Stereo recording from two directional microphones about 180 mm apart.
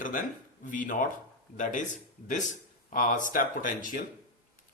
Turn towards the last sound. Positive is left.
turn(degrees=50)  # may be behind; listen again after turning